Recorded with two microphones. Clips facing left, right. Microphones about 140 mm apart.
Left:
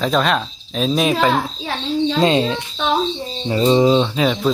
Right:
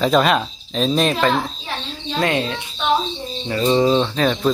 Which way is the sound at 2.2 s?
25° left (ahead or behind).